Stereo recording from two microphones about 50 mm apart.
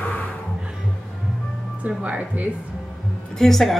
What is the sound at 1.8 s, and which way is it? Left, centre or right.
Speech, right.